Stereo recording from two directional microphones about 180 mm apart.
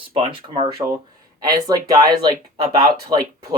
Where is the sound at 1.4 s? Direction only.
20° right (ahead or behind).